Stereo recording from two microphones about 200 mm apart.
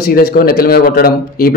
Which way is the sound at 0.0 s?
50° left (ahead or behind).